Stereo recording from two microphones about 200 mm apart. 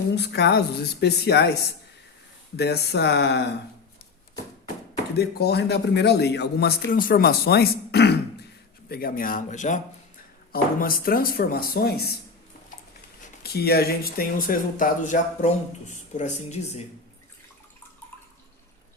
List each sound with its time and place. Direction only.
0.2 s a man's voice: 55° left (ahead or behind)
2.6 s a man's voice: 55° left (ahead or behind)
5.1 s a man's voice: 55° left (ahead or behind)
13.4 s speech: 50° left (ahead or behind); by 16.8 s 35° left (ahead or behind)